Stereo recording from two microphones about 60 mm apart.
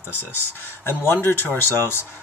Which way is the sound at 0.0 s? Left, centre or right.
Left.